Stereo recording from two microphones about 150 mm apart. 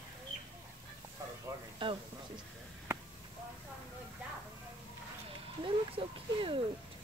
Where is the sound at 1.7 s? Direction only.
35° right (ahead or behind).